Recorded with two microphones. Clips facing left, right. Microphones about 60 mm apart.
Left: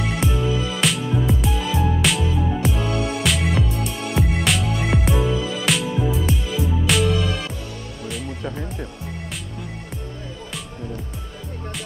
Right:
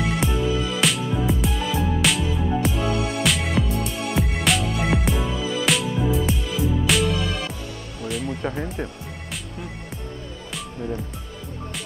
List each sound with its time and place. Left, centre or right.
0.0 s music: centre
8.5 s music: centre